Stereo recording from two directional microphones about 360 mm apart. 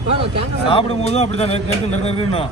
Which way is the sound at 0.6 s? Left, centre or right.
Centre.